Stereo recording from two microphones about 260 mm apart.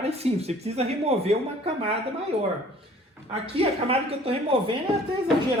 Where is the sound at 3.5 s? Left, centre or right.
Right.